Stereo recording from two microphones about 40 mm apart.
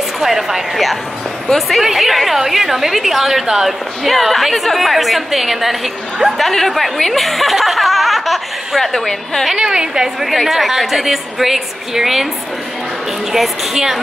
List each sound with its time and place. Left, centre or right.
0.2 s a woman's voice: centre
6.3 s a woman's voice: centre
9.6 s a woman's voice: centre
10.2 s a woman's voice: centre
13.3 s a woman's voice: centre